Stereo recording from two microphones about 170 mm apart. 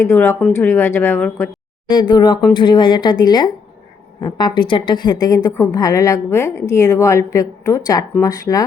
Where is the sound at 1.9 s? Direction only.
25° left (ahead or behind).